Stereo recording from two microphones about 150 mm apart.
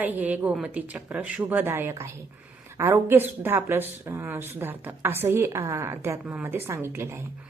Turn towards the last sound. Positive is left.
turn(degrees=-15)  # may be behind; listen again after turning